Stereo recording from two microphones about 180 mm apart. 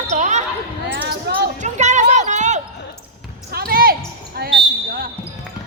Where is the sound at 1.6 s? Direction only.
40° right (ahead or behind).